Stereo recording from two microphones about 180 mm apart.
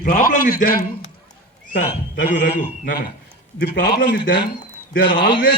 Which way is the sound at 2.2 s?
50° left (ahead or behind).